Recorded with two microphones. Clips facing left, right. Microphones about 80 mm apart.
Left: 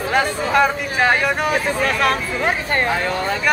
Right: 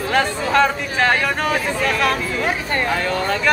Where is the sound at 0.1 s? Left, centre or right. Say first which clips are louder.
Even; centre.